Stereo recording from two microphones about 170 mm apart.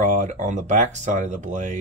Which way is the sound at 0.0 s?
45° right (ahead or behind).